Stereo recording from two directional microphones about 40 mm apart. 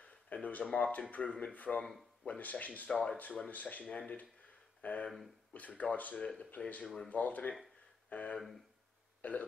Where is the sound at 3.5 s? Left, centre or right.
Left.